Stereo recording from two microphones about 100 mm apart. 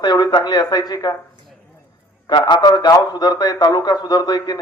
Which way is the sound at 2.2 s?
45° left (ahead or behind).